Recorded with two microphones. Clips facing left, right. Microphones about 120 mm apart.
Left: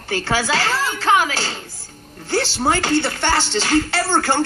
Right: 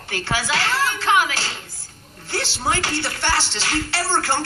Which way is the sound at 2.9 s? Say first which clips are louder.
Left 4 dB; 50° left (ahead or behind).